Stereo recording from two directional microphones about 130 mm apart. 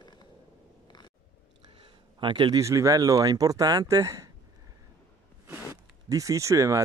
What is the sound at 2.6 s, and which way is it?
Speech, 25° right (ahead or behind).